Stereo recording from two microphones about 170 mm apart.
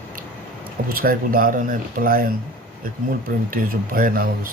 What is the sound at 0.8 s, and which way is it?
Speech, 60° right (ahead or behind).